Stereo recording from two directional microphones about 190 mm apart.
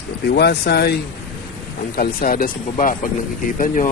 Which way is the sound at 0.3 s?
60° left (ahead or behind).